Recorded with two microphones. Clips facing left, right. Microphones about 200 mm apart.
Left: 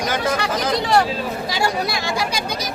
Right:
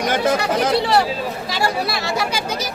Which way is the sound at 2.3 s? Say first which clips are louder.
Right 1 dB; 5° right (ahead or behind).